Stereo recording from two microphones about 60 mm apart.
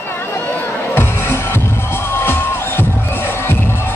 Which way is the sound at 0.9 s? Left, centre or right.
Left.